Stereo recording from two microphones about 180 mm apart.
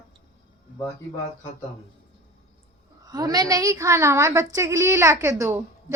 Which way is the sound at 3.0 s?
20° right (ahead or behind).